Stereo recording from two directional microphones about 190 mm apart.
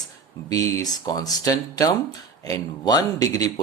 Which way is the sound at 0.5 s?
15° left (ahead or behind).